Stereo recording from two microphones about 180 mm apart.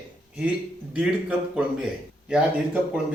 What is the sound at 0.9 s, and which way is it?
A man's voice, 5° right (ahead or behind).